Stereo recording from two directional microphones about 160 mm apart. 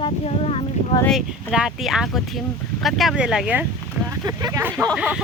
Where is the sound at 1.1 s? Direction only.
Centre (ahead or behind).